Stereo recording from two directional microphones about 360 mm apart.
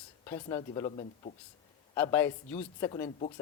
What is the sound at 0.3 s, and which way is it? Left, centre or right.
Speech, centre.